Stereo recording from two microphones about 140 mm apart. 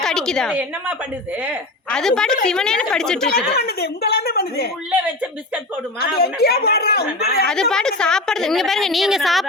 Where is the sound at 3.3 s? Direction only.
90° left.